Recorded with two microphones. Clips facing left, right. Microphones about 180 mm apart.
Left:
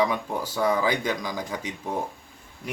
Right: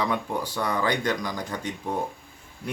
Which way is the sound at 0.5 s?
5° left (ahead or behind).